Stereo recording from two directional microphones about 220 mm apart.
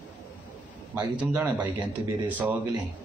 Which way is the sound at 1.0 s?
15° right (ahead or behind).